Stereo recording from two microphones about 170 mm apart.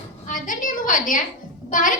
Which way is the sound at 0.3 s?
50° left (ahead or behind).